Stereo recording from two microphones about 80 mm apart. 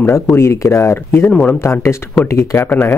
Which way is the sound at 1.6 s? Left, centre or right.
Left.